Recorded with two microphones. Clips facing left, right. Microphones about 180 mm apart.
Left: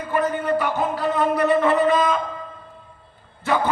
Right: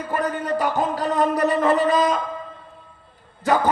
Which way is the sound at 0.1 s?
40° right (ahead or behind).